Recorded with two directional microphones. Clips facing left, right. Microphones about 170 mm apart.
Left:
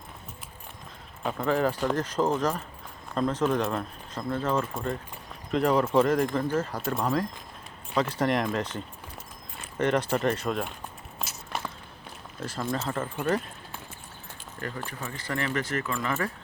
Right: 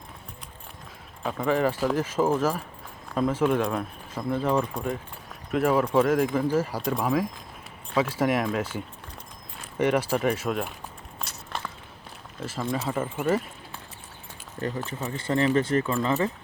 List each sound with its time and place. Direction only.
1.2 s speech: centre (ahead or behind)
11.2 s walk: 5° left (ahead or behind)
12.4 s speech: centre (ahead or behind)
14.8 s speech: 25° right (ahead or behind)